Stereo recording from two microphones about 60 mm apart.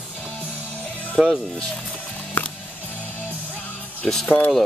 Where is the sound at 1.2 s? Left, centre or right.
Centre.